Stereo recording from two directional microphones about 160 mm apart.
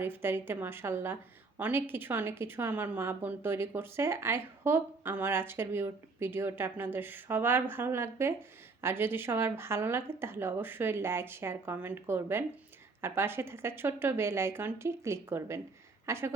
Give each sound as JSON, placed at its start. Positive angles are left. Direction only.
{"t": 0.0, "sound": "a woman's voice", "side_deg": -15}